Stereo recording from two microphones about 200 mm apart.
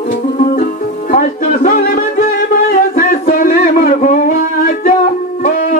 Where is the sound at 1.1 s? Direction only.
40° left (ahead or behind).